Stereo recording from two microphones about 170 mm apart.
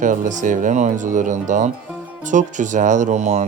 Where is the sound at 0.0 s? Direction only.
50° right (ahead or behind).